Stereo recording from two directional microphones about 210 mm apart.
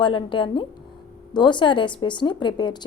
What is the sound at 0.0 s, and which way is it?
A woman's voice, 25° left (ahead or behind).